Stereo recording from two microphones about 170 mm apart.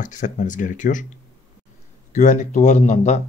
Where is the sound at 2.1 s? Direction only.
45° left (ahead or behind).